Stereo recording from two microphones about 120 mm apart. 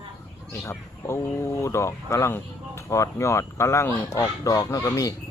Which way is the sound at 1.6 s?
25° left (ahead or behind).